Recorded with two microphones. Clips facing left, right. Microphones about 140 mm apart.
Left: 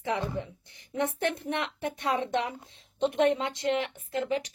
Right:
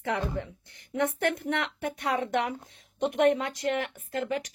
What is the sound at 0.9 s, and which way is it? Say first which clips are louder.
A woman's voice: right 2 dB; 25° left (ahead or behind).